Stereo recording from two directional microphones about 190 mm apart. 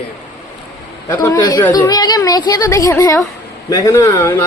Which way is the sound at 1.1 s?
10° left (ahead or behind).